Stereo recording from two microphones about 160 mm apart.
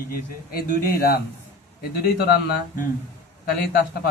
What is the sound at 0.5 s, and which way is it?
Speech, 70° left (ahead or behind).